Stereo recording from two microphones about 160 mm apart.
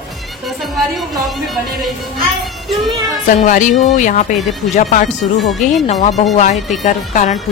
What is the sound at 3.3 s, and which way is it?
A woman's voice, 55° left (ahead or behind).